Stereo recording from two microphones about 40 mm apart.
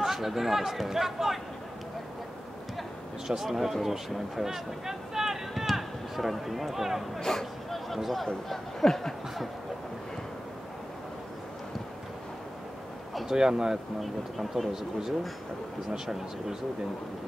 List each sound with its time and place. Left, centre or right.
0.0 s speech: centre
3.3 s speech: centre
7.2 s a sound: centre
7.9 s speech: centre
13.1 s a sound: centre
13.4 s speech: centre
14.0 s speech: centre